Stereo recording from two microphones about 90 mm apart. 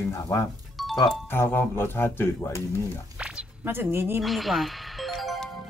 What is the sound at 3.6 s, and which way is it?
Speech, 25° right (ahead or behind).